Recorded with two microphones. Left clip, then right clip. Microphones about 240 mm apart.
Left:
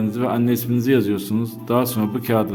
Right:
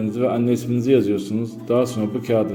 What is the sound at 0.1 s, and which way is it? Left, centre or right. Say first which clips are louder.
A man's voice: right 3 dB; left.